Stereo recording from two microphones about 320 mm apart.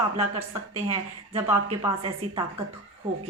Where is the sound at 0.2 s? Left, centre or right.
Centre.